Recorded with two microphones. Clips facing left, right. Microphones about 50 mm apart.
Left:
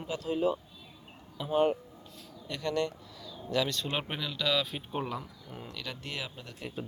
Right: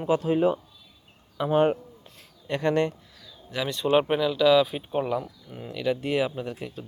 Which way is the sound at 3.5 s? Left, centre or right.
Centre.